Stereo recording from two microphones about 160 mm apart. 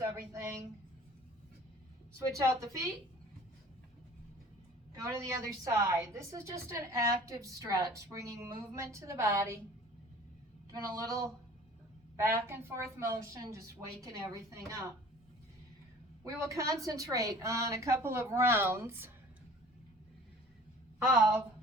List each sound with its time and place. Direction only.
0.0 s a sound: 15° right (ahead or behind)
2.4 s a woman's voice: 20° right (ahead or behind)
5.0 s a woman's voice: 20° right (ahead or behind)
10.7 s a woman's voice: 25° right (ahead or behind)
16.2 s a woman's voice: 20° right (ahead or behind)